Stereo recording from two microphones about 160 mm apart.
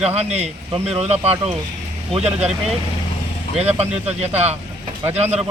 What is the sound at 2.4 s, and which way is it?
Speech, 5° right (ahead or behind).